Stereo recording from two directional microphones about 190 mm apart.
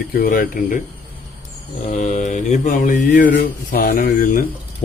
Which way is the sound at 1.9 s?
40° left (ahead or behind).